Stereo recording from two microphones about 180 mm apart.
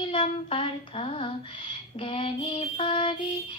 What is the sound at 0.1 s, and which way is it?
A woman's voice, 30° left (ahead or behind).